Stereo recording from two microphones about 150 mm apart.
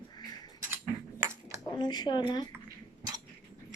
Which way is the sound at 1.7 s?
30° left (ahead or behind).